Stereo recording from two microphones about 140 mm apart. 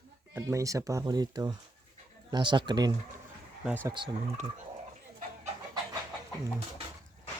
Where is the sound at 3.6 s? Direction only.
15° right (ahead or behind).